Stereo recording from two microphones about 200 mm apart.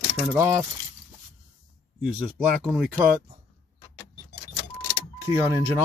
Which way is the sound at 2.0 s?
5° right (ahead or behind).